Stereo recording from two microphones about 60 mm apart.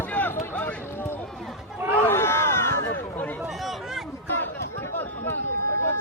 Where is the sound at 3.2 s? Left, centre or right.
Left.